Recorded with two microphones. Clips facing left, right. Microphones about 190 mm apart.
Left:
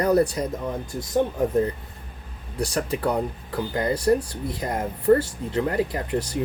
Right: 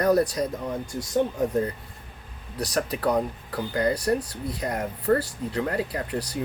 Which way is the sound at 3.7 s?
25° left (ahead or behind).